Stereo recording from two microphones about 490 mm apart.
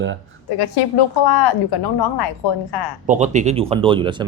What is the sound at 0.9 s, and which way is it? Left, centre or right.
A woman's voice, left.